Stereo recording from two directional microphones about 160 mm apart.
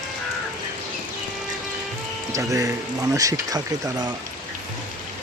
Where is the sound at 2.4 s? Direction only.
20° right (ahead or behind).